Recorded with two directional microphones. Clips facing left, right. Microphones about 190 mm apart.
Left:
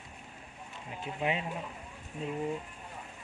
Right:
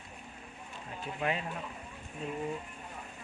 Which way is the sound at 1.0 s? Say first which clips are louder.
Left 1 dB; 20° left (ahead or behind).